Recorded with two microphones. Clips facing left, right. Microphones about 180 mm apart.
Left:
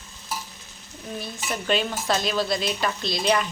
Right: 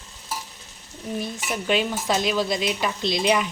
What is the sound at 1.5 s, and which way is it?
Speech, 10° right (ahead or behind).